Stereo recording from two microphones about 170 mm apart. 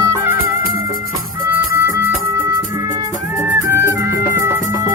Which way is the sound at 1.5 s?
15° right (ahead or behind).